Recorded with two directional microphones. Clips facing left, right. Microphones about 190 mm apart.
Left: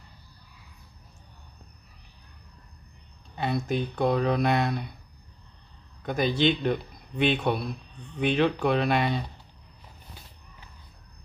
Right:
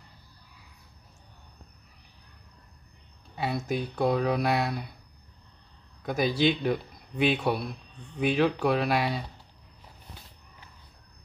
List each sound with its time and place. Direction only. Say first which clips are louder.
3.3 s speech: left 2 dB; 5° right (ahead or behind)
6.0 s speech: left 1 dB; 5° right (ahead or behind)